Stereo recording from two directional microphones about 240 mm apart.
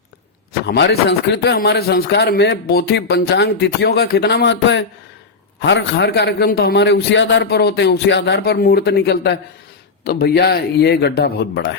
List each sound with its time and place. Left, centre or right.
0.6 s speech: left